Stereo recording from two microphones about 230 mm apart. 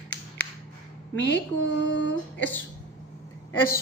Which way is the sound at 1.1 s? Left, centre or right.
Left.